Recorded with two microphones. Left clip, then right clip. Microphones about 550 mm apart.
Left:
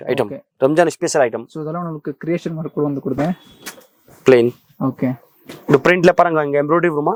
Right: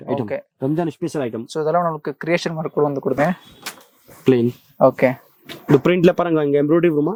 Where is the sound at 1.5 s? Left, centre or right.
Right.